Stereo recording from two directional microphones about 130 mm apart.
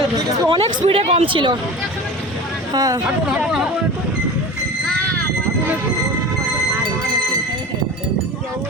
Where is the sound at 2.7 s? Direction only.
30° right (ahead or behind).